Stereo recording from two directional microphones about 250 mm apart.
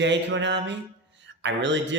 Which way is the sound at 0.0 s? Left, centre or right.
Right.